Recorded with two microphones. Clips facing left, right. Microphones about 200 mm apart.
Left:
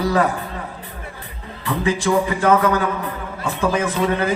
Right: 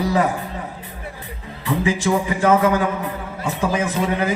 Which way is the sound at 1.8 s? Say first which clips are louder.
Left 2 dB; 20° right (ahead or behind).